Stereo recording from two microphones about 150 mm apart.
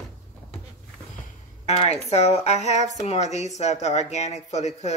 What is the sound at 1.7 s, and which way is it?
Speech, 40° left (ahead or behind).